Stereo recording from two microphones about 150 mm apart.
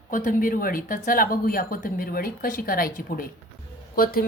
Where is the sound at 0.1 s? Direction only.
65° left (ahead or behind).